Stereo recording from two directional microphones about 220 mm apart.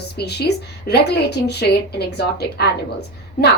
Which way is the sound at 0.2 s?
50° left (ahead or behind).